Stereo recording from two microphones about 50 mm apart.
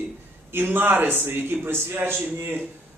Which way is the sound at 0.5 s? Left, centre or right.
Right.